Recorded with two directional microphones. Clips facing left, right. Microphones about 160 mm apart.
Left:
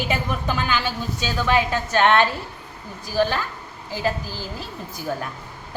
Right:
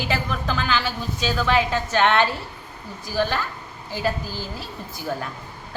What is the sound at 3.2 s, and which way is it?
Speech, 15° left (ahead or behind).